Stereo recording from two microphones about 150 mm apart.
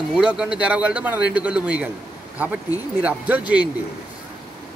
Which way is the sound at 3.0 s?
10° right (ahead or behind).